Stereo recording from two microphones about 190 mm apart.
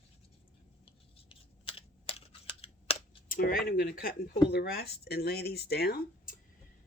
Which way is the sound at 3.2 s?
50° left (ahead or behind).